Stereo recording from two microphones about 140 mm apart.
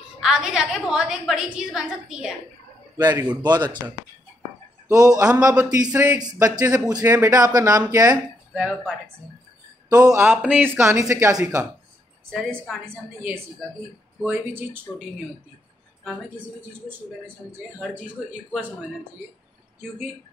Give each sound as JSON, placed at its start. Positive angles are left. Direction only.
{"t": 0.2, "sound": "a woman's voice", "side_deg": -5}
{"t": 3.0, "sound": "speech", "side_deg": -25}
{"t": 9.8, "sound": "speech", "side_deg": -25}
{"t": 10.2, "sound": "speech", "side_deg": -10}
{"t": 17.5, "sound": "speech", "side_deg": -10}